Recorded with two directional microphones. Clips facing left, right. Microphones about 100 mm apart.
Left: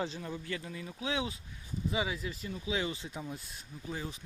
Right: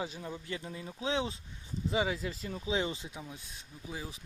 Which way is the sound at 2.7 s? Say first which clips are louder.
Right 2 dB; 25° right (ahead or behind).